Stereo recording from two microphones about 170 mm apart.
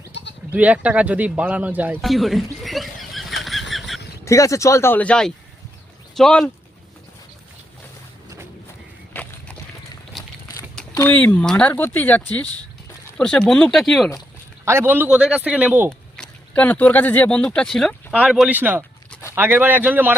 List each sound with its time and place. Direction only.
0.1 s bleat: 90° left
0.5 s speech: 10° right (ahead or behind)
4.3 s speech: 20° left (ahead or behind); by 6.5 s centre (ahead or behind)
9.2 s boat: 10° left (ahead or behind)
10.1 s a sound: centre (ahead or behind)
10.9 s speech: 10° left (ahead or behind)
14.6 s a man's voice: 15° right (ahead or behind)
16.1 s a man's voice: 5° left (ahead or behind); by 20.1 s 10° right (ahead or behind)